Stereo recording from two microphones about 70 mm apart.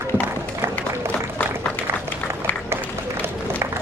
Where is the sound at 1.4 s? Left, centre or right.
Left.